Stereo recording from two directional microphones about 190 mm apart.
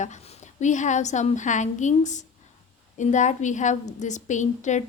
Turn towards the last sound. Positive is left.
turn(degrees=40)  # may be behind; listen again after turning